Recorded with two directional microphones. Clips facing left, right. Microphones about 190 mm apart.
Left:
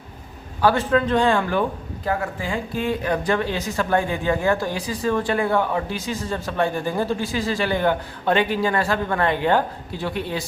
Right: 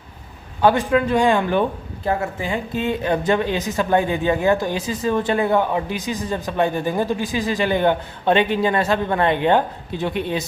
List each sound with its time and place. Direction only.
0.6 s a man's voice: 15° right (ahead or behind)